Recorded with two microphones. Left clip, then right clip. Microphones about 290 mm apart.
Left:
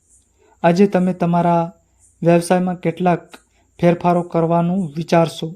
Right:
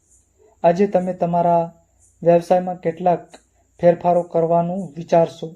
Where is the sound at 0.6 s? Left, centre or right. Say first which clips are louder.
Left 1 dB; left.